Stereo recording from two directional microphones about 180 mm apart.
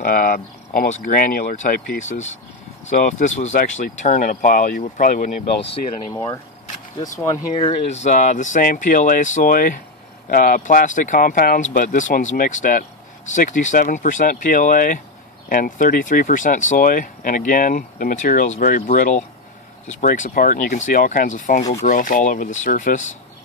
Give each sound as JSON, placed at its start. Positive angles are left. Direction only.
{"t": 0.0, "sound": "speech", "side_deg": 50}
{"t": 6.1, "sound": "speech", "side_deg": 20}
{"t": 7.5, "sound": "speech", "side_deg": 35}